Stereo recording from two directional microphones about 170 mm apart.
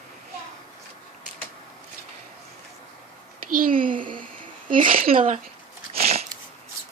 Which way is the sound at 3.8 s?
55° right (ahead or behind).